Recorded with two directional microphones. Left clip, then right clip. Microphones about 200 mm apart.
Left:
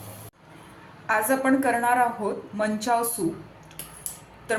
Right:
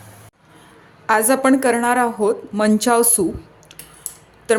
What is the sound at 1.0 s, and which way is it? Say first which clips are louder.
A woman's voice: right 7 dB; 60° right (ahead or behind).